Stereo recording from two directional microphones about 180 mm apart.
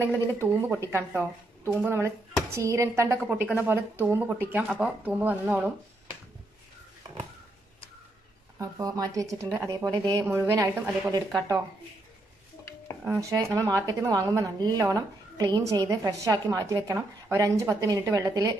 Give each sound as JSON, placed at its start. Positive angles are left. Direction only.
{"t": 0.0, "sound": "a woman's voice", "side_deg": -15}
{"t": 8.5, "sound": "a woman's voice", "side_deg": -20}
{"t": 13.0, "sound": "a woman's voice", "side_deg": -15}